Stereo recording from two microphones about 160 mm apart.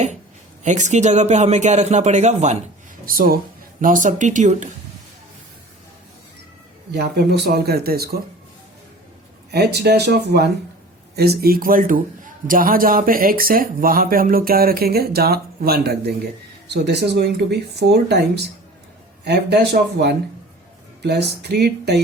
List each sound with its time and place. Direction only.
0.6 s a man's voice: 50° right (ahead or behind)
3.1 s a man's voice: 65° right (ahead or behind)
6.9 s speech: 90° right
9.5 s speech: 90° right
11.2 s a man's voice: 75° right (ahead or behind)
16.6 s speech: 90° right